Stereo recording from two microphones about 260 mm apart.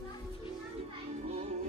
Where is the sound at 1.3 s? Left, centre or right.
Right.